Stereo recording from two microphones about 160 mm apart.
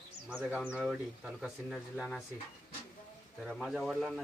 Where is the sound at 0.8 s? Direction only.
5° right (ahead or behind).